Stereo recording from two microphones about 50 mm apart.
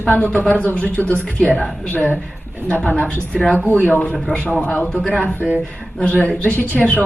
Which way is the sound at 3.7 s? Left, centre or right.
Left.